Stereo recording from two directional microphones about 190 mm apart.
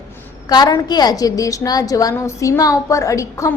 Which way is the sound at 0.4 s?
20° left (ahead or behind).